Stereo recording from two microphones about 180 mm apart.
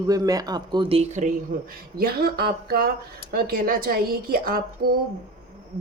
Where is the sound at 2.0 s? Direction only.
60° right (ahead or behind).